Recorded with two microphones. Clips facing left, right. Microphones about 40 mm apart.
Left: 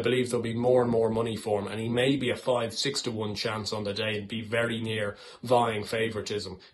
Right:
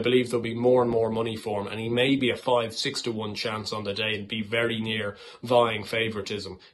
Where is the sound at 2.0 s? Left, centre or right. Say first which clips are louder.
Right 3 dB; right.